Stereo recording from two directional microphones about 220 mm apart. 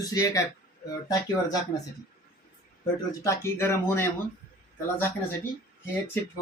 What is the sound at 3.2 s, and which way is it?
Speech, 10° left (ahead or behind).